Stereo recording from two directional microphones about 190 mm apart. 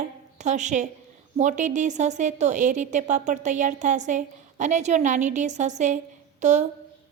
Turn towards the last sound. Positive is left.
turn(degrees=-40)  # may be behind; listen again after turning